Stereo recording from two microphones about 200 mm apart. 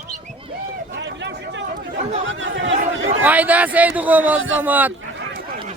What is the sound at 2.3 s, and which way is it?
Speech, 70° right (ahead or behind).